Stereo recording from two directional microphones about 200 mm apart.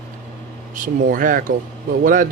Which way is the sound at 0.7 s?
40° right (ahead or behind).